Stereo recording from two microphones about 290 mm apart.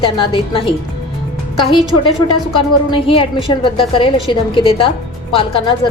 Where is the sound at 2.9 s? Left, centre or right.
Centre.